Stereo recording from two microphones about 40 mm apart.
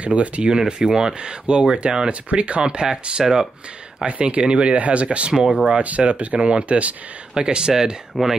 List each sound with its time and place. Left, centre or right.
0.0 s speech: right
2.9 s speech: centre
4.0 s speech: right
5.3 s speech: centre
5.8 s speech: right
7.3 s speech: centre